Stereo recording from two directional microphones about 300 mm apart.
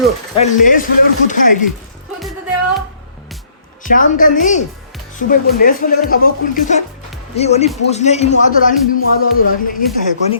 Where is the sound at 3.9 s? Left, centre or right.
Left.